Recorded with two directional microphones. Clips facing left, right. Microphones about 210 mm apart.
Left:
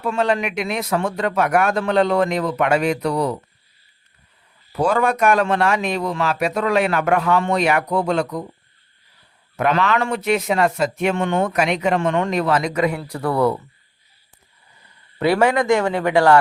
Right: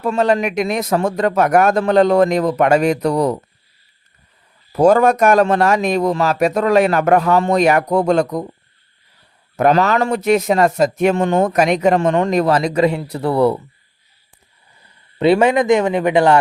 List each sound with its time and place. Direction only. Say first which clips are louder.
0.0 s a man's voice: right 4 dB; 40° right (ahead or behind)
4.7 s a man's voice: right 7 dB; 40° right (ahead or behind)
9.6 s a man's voice: right 5 dB; 40° right (ahead or behind); by 13.6 s 25° right (ahead or behind)
15.2 s speech: right 4 dB; 20° right (ahead or behind)